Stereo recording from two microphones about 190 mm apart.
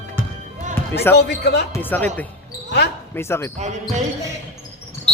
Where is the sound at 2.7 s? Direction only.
65° left (ahead or behind).